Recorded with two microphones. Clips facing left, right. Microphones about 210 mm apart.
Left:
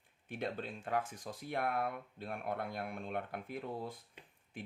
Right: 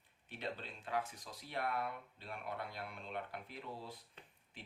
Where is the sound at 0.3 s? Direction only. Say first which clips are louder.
Left 5 dB; 50° left (ahead or behind).